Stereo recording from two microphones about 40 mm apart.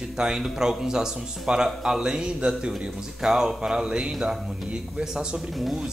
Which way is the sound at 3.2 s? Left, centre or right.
Centre.